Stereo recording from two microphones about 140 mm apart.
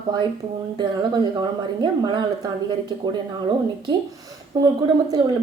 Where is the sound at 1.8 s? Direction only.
35° right (ahead or behind).